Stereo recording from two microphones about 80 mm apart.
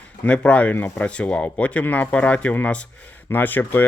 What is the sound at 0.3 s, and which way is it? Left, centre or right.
Speech, centre.